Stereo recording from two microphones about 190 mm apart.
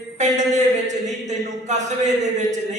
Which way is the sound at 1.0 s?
40° right (ahead or behind).